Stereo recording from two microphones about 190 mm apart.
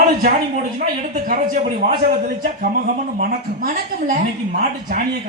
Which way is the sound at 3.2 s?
45° right (ahead or behind).